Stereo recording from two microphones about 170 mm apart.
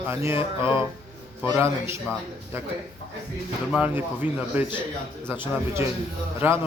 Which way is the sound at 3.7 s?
10° right (ahead or behind).